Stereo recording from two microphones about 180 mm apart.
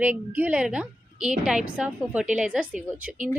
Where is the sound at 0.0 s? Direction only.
10° right (ahead or behind).